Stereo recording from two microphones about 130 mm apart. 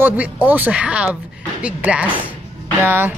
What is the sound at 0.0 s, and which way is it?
Speech, 10° right (ahead or behind).